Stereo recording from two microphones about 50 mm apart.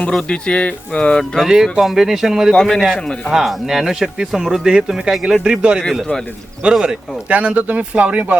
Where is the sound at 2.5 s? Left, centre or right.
Centre.